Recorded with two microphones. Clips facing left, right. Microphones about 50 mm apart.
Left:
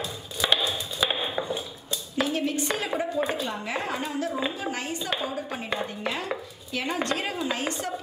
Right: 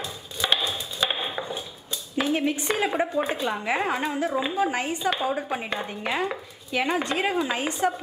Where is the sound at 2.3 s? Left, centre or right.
Centre.